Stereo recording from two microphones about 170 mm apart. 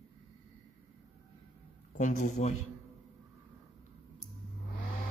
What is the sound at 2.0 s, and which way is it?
Speech, 40° left (ahead or behind).